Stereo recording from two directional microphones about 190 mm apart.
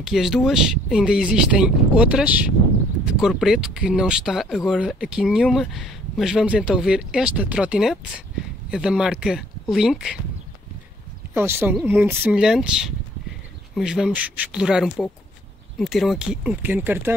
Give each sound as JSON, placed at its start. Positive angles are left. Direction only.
{"t": 0.0, "sound": "speech", "side_deg": 0}
{"t": 11.3, "sound": "speech", "side_deg": -10}